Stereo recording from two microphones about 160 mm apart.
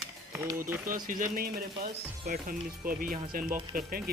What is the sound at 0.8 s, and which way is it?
Speech, 60° right (ahead or behind).